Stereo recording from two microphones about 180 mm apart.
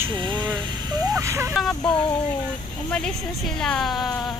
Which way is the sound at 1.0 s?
20° right (ahead or behind).